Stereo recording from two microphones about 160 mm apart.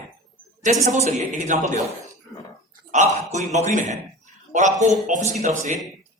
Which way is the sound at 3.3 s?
45° right (ahead or behind).